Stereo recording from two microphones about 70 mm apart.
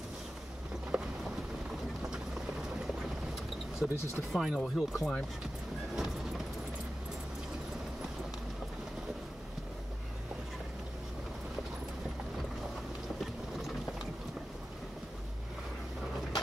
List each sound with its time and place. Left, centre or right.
0.9 s a sound: centre
3.8 s speech: right
4.3 s speech: centre
5.9 s vehicle: centre